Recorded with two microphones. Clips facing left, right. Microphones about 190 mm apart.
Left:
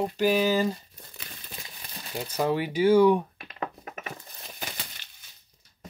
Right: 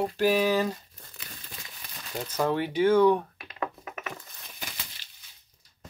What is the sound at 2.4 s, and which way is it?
Speech, 10° left (ahead or behind).